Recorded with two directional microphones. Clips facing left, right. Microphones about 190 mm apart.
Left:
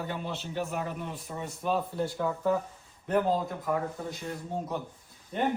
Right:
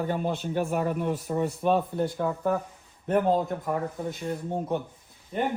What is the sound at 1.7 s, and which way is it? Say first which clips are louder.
Speech: right 4 dB; 20° right (ahead or behind).